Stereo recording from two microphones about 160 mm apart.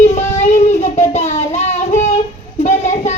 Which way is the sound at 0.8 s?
15° left (ahead or behind).